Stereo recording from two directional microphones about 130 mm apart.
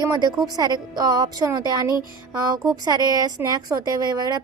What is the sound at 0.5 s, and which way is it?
A woman's voice, 30° right (ahead or behind).